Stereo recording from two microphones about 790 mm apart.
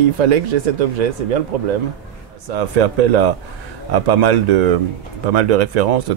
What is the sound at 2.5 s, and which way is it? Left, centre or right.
Speech, right.